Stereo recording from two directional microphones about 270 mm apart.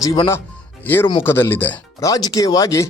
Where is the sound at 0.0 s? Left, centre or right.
Centre.